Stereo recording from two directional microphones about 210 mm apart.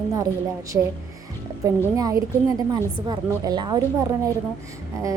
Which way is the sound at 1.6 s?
15° right (ahead or behind).